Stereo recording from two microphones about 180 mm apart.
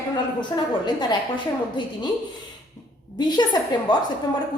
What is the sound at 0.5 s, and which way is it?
Speech, 25° left (ahead or behind).